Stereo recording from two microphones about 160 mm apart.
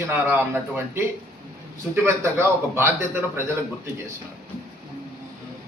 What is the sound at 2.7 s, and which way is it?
Speech, 15° right (ahead or behind).